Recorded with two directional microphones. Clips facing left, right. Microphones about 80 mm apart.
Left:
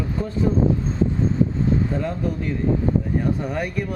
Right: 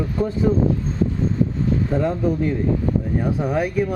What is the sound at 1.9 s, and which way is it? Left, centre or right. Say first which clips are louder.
Speech: right 5 dB; centre.